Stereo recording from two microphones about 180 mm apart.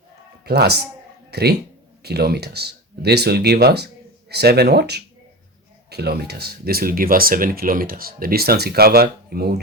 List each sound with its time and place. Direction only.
0.4 s a man's voice: 60° right (ahead or behind)